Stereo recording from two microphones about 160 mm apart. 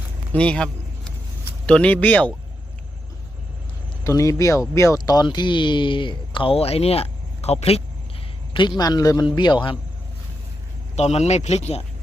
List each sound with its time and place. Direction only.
0.3 s vehicle: 5° left (ahead or behind)
1.6 s speech: 5° left (ahead or behind)
4.0 s a man's voice: 20° left (ahead or behind); by 7.8 s 40° left (ahead or behind)
8.5 s a man's voice: 30° left (ahead or behind)
10.9 s speech: 45° left (ahead or behind)